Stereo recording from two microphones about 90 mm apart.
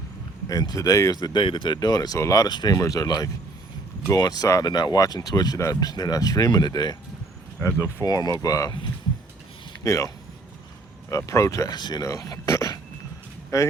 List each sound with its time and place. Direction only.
0.4 s speech: 45° left (ahead or behind)
1.1 s speech: 55° left (ahead or behind); by 4.6 s 40° left (ahead or behind)
4.6 s speech: 50° left (ahead or behind)
8.0 s speech: 45° left (ahead or behind)
9.8 s speech: 40° left (ahead or behind)
11.1 s speech: 35° left (ahead or behind)
11.8 s speech: 50° left (ahead or behind)
12.0 s speech: 40° left (ahead or behind)